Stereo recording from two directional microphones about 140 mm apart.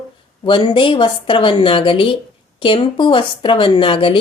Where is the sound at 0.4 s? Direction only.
35° left (ahead or behind).